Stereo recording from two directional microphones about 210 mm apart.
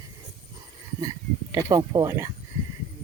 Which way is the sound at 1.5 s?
15° right (ahead or behind).